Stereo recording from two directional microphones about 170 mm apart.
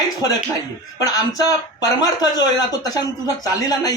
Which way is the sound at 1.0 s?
20° left (ahead or behind).